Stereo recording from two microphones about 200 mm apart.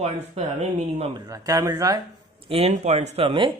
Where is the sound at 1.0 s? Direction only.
20° right (ahead or behind).